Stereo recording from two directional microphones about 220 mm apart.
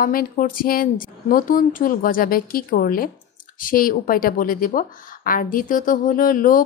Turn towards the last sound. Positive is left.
turn(degrees=40)  # may be behind; listen again after turning